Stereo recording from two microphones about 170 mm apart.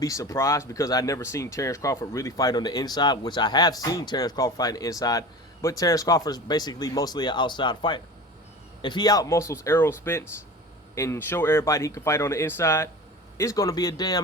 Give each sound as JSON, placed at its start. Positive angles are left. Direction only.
{"t": 0.0, "sound": "speech", "side_deg": 20}